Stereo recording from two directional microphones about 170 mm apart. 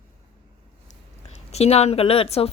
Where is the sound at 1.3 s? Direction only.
40° left (ahead or behind).